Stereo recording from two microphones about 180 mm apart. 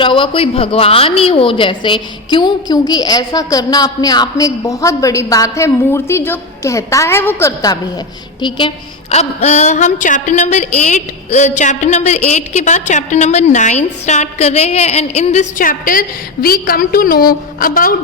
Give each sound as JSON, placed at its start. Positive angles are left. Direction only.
{"t": 0.0, "sound": "a woman's voice", "side_deg": 30}